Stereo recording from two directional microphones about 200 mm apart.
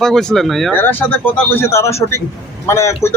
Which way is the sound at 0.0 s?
Centre (ahead or behind).